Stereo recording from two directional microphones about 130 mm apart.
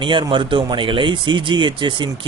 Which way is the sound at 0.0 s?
40° right (ahead or behind).